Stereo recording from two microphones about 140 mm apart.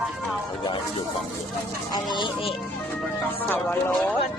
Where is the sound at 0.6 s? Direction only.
35° left (ahead or behind).